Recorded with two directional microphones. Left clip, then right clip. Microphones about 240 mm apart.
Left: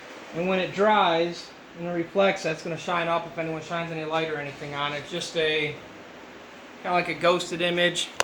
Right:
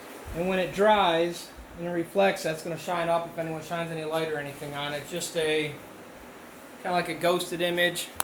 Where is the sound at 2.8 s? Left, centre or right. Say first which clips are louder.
Left 1 dB; left.